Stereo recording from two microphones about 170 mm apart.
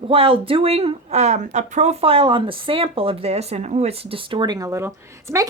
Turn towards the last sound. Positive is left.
turn(degrees=-15)  # may be behind; listen again after turning